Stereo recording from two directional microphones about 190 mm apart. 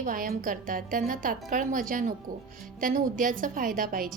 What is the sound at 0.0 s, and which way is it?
A woman's voice, 45° right (ahead or behind).